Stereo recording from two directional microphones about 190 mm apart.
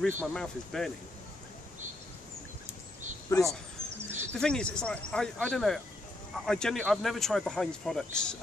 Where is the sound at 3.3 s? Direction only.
15° left (ahead or behind).